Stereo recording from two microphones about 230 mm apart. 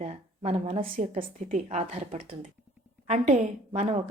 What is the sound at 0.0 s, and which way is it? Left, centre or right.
A woman's voice, right.